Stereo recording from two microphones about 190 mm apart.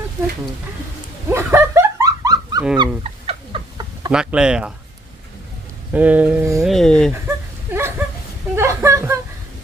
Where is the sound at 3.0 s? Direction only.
30° right (ahead or behind).